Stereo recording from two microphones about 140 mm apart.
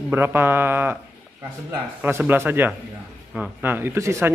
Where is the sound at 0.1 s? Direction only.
15° right (ahead or behind).